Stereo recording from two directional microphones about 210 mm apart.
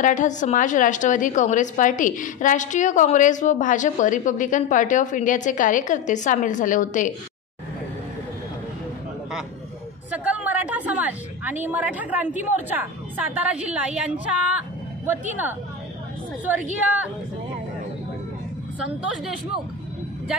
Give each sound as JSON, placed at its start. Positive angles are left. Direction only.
{"t": 0.0, "sound": "a woman's voice", "side_deg": 35}
{"t": 10.1, "sound": "a sound", "side_deg": -5}
{"t": 11.6, "sound": "a woman's voice", "side_deg": -10}